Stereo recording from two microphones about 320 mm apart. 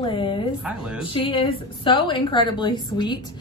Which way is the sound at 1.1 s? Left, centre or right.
Centre.